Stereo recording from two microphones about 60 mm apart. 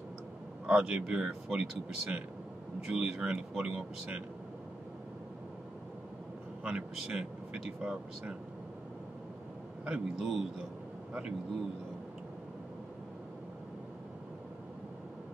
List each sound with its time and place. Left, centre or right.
0.7 s speech: centre
6.6 s speech: centre
9.8 s speech: centre